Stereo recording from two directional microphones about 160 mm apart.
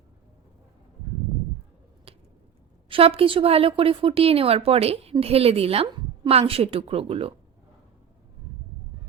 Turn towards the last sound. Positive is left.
turn(degrees=-35)  # may be behind; listen again after turning